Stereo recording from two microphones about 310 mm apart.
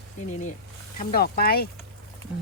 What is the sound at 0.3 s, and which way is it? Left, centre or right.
Speech, left.